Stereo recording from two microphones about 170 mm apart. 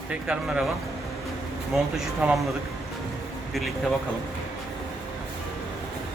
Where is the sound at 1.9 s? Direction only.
Centre (ahead or behind).